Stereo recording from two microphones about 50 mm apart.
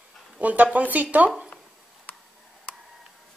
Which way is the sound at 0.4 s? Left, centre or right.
Right.